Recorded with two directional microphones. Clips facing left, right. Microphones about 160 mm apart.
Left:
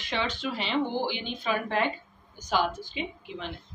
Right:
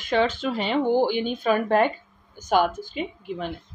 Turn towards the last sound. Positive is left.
turn(degrees=-45)  # may be behind; listen again after turning